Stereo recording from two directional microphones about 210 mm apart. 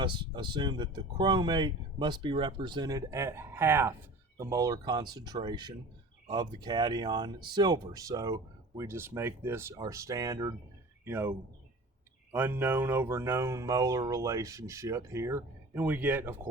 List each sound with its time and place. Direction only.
0.0 s speech: 20° right (ahead or behind)